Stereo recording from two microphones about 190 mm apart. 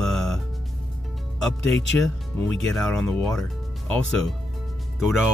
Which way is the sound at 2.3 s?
5° left (ahead or behind).